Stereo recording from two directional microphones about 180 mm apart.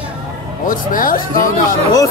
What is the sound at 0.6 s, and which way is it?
Speech, 50° left (ahead or behind).